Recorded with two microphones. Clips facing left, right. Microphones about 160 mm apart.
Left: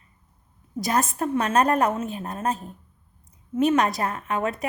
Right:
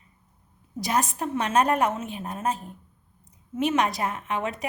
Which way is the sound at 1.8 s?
40° left (ahead or behind).